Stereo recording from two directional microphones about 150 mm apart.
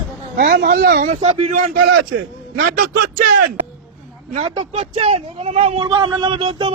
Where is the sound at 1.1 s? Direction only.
45° right (ahead or behind).